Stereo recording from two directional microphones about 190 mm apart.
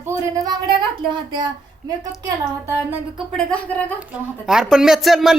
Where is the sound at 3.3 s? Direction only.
5° left (ahead or behind).